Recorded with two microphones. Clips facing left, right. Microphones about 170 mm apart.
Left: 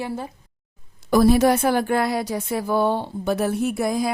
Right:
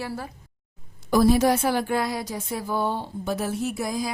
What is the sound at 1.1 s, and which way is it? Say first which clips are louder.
Speech: left 3 dB; 65° left (ahead or behind).